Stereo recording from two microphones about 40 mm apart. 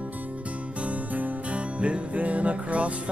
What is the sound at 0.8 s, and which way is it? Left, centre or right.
Music, right.